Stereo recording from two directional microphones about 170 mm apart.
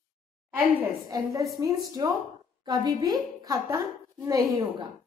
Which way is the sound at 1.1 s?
20° right (ahead or behind).